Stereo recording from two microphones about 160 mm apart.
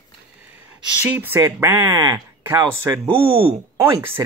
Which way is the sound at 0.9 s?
10° right (ahead or behind).